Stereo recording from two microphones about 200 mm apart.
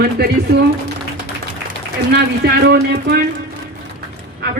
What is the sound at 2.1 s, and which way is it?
A man's voice, 50° right (ahead or behind).